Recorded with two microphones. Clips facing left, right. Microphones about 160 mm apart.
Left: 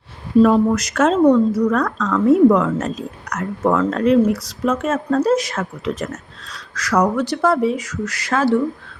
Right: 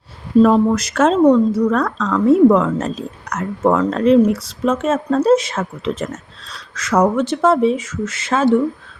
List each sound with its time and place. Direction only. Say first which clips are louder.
0.4 s a woman's voice: right 1 dB; 30° right (ahead or behind)